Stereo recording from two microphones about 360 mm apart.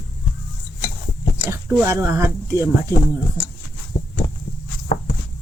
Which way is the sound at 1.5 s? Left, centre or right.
Centre.